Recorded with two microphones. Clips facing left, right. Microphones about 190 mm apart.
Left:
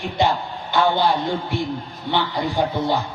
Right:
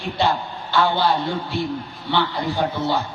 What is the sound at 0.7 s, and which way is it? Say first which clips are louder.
Speech: left 1 dB; 20° left (ahead or behind).